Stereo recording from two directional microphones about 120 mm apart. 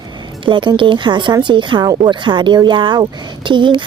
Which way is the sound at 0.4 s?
45° right (ahead or behind).